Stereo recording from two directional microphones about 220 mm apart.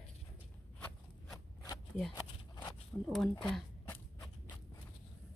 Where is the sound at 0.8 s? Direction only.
15° left (ahead or behind).